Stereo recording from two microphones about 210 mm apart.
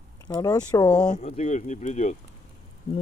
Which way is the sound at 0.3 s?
15° left (ahead or behind).